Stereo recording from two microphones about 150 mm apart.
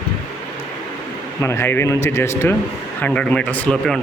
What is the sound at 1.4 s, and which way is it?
Speech, 15° left (ahead or behind).